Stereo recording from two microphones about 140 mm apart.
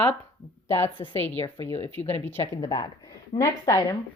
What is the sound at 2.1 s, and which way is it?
Speech, 15° left (ahead or behind).